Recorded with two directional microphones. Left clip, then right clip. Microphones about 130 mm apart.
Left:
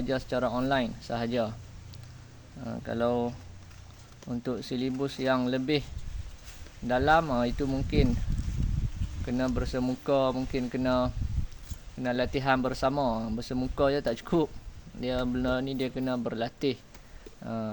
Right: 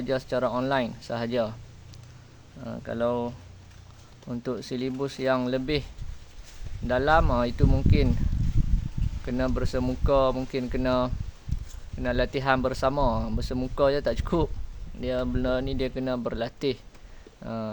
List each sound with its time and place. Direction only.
0.0 s speech: 20° right (ahead or behind)
2.6 s speech: 10° right (ahead or behind)
4.3 s speech: 20° right (ahead or behind)
6.8 s speech: 20° right (ahead or behind)
9.2 s speech: 20° right (ahead or behind)